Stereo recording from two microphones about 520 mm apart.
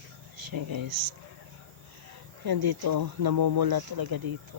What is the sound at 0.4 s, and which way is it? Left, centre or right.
Speech, right.